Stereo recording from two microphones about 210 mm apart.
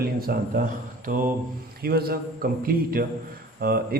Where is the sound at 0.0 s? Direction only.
45° right (ahead or behind).